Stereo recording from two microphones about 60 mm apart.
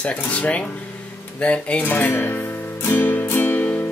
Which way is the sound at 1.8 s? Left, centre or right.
Left.